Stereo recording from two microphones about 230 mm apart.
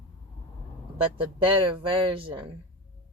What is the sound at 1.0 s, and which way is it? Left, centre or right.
Speech, right.